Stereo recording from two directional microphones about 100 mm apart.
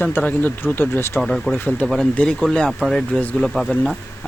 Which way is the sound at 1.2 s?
Centre (ahead or behind).